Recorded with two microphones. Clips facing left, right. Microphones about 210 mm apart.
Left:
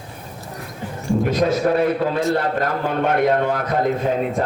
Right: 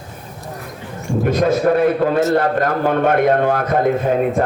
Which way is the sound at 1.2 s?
50° right (ahead or behind).